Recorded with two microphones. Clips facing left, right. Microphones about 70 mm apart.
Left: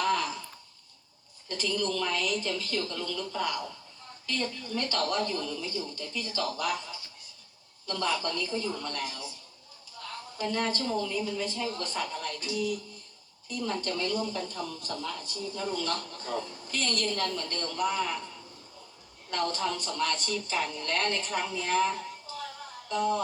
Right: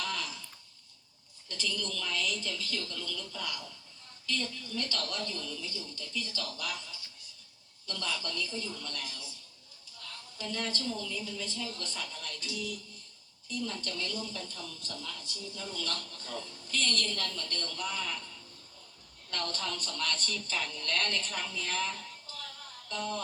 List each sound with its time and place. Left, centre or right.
0.0 s a sound: left
1.5 s a man's voice: left
19.3 s speech: centre